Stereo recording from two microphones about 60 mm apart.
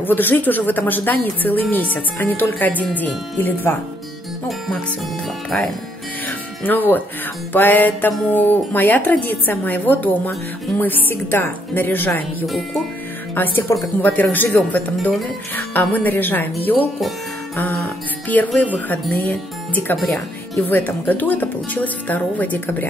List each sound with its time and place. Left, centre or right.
0.0 s speech: left
6.7 s speech: left
12.4 s speech: centre
13.3 s speech: left